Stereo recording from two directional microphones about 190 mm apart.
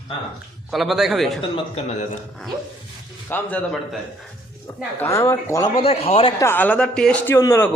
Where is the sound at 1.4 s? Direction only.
25° left (ahead or behind).